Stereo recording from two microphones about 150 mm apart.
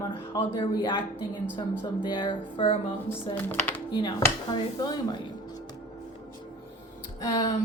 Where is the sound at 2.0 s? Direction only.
30° left (ahead or behind).